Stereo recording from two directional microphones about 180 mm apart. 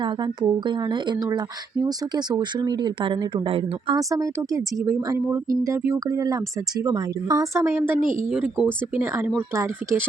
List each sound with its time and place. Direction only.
0.0 s speech: 25° right (ahead or behind)
4.1 s speech: 15° right (ahead or behind)
8.0 s speech: 45° right (ahead or behind)
8.3 s speech: 5° right (ahead or behind)